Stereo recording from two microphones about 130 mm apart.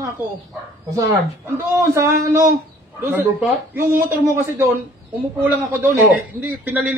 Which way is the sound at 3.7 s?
15° right (ahead or behind).